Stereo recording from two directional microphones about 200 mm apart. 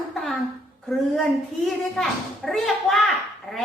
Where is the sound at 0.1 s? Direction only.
Centre (ahead or behind).